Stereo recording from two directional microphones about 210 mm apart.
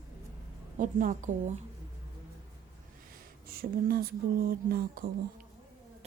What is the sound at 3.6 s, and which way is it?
Speech, 45° right (ahead or behind).